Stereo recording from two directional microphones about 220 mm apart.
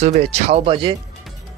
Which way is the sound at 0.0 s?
30° right (ahead or behind).